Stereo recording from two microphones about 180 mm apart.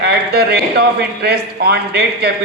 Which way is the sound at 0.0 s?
65° right (ahead or behind).